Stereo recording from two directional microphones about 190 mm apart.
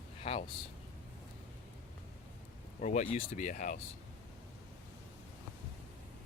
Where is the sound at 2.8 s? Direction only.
40° left (ahead or behind).